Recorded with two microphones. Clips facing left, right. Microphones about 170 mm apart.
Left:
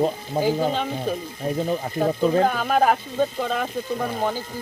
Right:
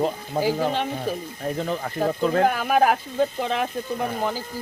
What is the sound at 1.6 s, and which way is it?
Speech, 15° left (ahead or behind).